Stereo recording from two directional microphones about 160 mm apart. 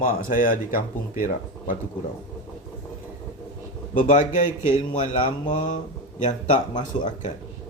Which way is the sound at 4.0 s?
55° left (ahead or behind).